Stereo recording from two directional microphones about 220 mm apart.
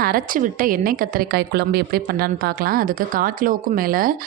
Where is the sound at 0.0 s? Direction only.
40° right (ahead or behind).